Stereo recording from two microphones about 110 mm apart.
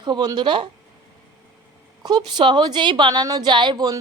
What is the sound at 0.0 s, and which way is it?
Speech, 40° right (ahead or behind).